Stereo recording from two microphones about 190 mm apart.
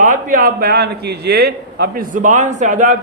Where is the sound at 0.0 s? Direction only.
45° right (ahead or behind).